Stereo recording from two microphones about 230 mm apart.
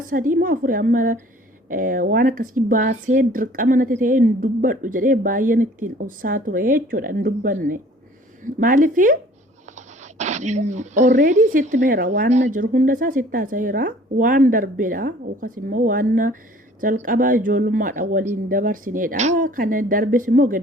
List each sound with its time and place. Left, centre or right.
0.0 s speech: right